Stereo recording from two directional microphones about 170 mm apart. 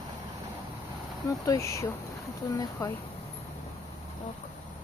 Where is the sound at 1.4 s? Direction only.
15° left (ahead or behind).